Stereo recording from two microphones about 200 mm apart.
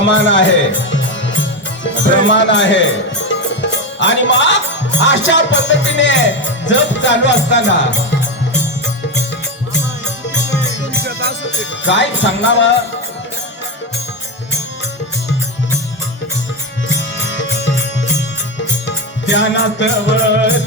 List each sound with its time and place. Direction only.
0.0 s speech: 65° left (ahead or behind)
5.0 s music: 65° left (ahead or behind)
11.0 s music: 55° right (ahead or behind)
11.4 s speech: 65° left (ahead or behind)
17.0 s music: 65° left (ahead or behind)
18.9 s music: 65° left (ahead or behind)